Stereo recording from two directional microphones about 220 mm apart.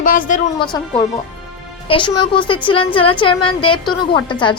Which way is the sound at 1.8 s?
20° left (ahead or behind).